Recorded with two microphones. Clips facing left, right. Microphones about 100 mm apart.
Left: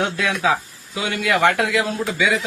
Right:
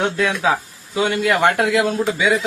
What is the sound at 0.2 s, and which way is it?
A man's voice, 30° right (ahead or behind).